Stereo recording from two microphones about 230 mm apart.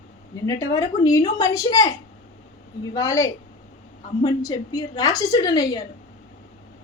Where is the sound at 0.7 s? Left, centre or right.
Centre.